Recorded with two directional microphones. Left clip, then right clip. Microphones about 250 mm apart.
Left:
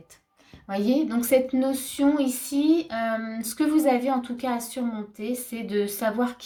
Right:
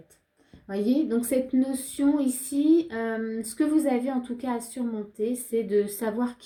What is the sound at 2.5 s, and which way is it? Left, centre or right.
Speech, left.